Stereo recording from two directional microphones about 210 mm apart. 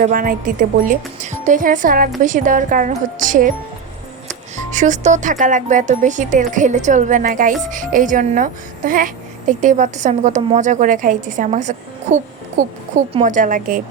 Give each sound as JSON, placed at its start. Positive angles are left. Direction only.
{"t": 0.0, "sound": "speech", "side_deg": -40}
{"t": 4.7, "sound": "speech", "side_deg": -35}